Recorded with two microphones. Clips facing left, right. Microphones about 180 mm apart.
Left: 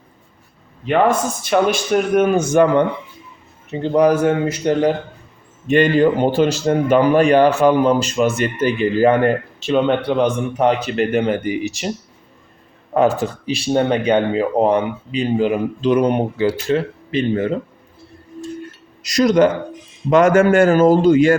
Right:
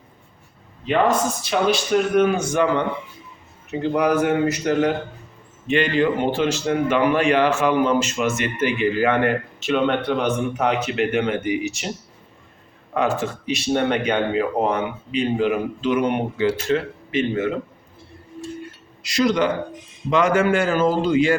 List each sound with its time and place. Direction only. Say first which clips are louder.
0.9 s a man's voice: left 3 dB; 50° left (ahead or behind)
3.9 s speech: left 5 dB; 30° left (ahead or behind)
5.6 s speech: left 6 dB; 40° left (ahead or behind)
10.6 s speech: left 7 dB; 35° left (ahead or behind)
12.9 s speech: left 6 dB; 40° left (ahead or behind)
19.0 s a man's voice: left 6 dB; 45° left (ahead or behind)